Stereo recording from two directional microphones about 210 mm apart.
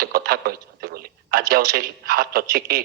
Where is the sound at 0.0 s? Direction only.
45° right (ahead or behind).